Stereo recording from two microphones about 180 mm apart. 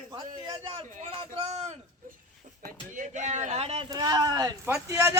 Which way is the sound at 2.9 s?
40° right (ahead or behind).